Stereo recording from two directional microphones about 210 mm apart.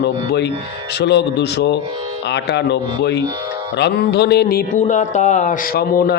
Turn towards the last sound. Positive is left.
turn(degrees=45)  # may be behind; listen again after turning